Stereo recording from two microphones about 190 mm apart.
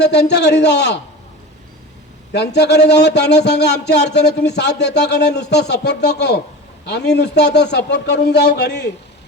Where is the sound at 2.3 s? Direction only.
65° left (ahead or behind).